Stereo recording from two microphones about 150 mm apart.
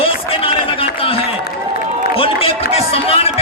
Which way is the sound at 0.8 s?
40° left (ahead or behind).